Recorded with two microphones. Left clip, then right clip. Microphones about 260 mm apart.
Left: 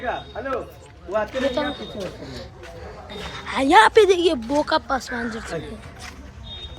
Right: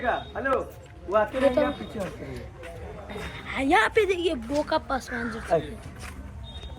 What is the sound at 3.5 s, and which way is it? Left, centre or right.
A woman's voice, centre.